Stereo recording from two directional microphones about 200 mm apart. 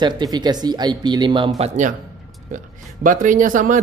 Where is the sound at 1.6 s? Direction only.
40° right (ahead or behind).